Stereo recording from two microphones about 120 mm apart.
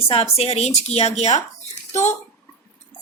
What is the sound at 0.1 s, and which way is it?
Speech, 55° left (ahead or behind).